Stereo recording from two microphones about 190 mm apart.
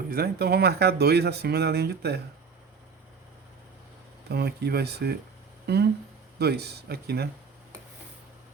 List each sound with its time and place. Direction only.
0.1 s speech: 55° right (ahead or behind)
4.3 s speech: 55° right (ahead or behind)